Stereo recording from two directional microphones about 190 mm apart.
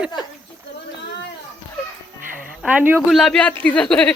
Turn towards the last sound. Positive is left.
turn(degrees=5)  # may be behind; listen again after turning